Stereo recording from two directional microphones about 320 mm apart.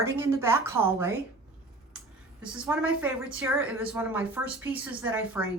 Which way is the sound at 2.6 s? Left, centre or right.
Centre.